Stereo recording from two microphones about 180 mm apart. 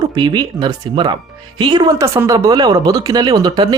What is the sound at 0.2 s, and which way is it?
Speech, 25° right (ahead or behind).